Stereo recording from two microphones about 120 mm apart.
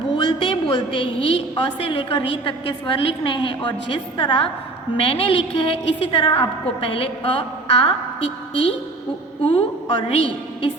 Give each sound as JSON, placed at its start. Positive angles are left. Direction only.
{"t": 0.1, "sound": "a woman's voice", "side_deg": 45}